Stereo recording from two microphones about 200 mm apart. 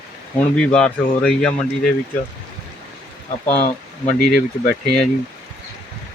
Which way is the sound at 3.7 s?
40° left (ahead or behind).